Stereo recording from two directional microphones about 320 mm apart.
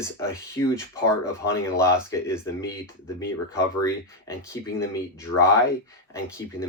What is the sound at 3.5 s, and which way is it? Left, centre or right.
Speech, centre.